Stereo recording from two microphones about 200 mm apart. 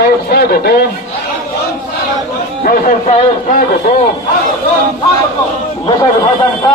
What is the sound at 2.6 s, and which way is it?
Speech, 45° left (ahead or behind).